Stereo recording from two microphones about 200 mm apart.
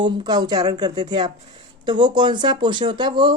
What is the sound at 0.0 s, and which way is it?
Speech, 20° right (ahead or behind).